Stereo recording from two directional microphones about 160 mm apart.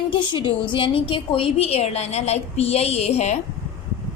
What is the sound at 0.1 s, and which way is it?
A woman's voice, 30° left (ahead or behind).